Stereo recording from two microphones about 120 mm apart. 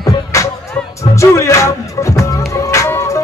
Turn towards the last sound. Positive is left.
turn(degrees=25)  # may be behind; listen again after turning